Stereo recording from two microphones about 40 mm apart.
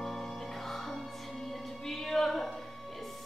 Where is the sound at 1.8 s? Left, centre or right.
Centre.